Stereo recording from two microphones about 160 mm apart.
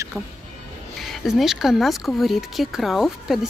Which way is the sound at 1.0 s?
Centre (ahead or behind).